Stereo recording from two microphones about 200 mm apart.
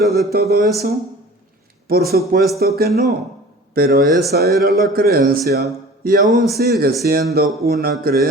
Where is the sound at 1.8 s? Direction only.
50° right (ahead or behind).